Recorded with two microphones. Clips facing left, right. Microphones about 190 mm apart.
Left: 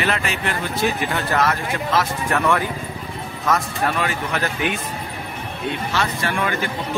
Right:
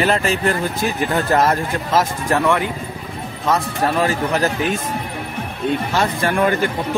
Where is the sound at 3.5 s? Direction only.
35° right (ahead or behind).